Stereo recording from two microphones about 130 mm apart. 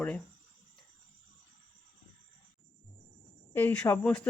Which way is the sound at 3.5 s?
15° left (ahead or behind).